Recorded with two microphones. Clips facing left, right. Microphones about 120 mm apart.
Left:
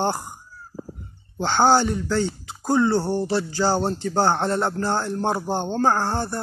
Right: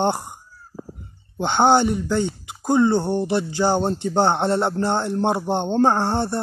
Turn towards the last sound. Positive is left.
turn(degrees=-25)  # may be behind; listen again after turning